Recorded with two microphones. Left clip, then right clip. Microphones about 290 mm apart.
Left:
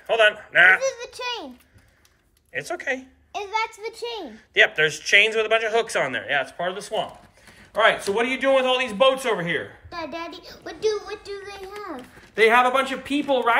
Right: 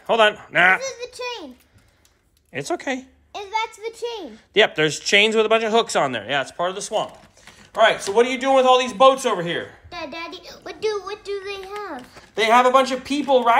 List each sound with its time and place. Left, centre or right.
0.1 s a man's voice: centre
0.8 s a sound: centre
2.5 s a man's voice: centre
4.3 s a man's voice: centre